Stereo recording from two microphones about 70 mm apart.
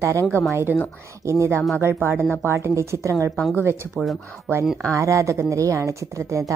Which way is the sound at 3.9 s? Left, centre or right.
Centre.